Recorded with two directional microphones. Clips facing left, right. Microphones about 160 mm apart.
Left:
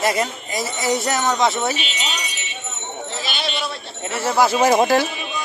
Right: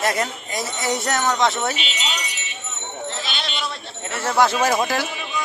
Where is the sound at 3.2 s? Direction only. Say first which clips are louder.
Left 3 dB; 5° left (ahead or behind).